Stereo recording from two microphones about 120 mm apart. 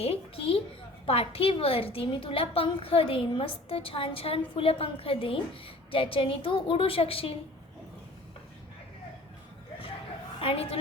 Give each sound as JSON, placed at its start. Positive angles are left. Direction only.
{"t": 0.0, "sound": "a woman's voice", "side_deg": 55}
{"t": 10.4, "sound": "a woman's voice", "side_deg": 55}